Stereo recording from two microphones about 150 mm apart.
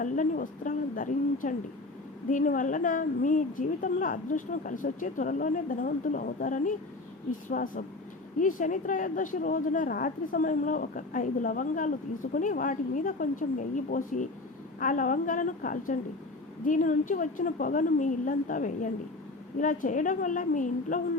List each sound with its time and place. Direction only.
0.0 s a woman's voice: 60° left (ahead or behind)